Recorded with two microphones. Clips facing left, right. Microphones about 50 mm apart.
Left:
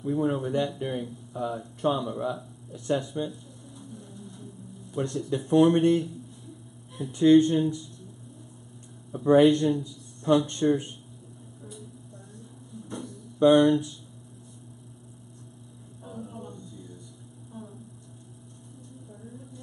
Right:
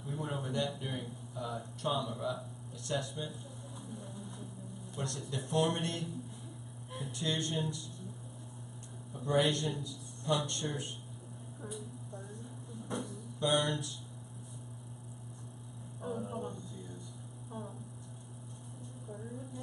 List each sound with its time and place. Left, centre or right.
0.0 s speech: left
3.9 s music: centre
4.9 s speech: centre
7.1 s speech: left
9.1 s speech: left
12.9 s a sound: centre
13.4 s speech: left
16.0 s a sound: centre